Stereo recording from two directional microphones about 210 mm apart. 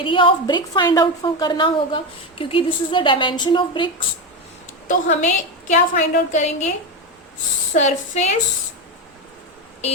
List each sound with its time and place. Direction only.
0.0 s a woman's voice: 25° left (ahead or behind)
4.9 s a woman's voice: 35° left (ahead or behind)
7.7 s a woman's voice: 35° left (ahead or behind)